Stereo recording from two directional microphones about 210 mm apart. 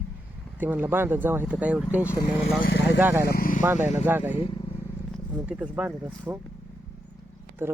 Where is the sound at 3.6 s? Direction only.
10° right (ahead or behind).